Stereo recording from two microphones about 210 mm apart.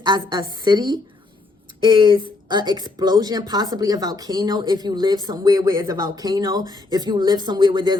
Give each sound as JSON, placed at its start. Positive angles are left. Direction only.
{"t": 0.0, "sound": "speech", "side_deg": -20}